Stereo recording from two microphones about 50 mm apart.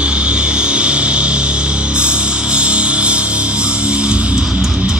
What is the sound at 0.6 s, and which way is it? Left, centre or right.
Music, right.